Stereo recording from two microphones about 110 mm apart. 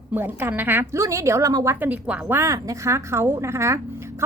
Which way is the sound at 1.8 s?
15° right (ahead or behind).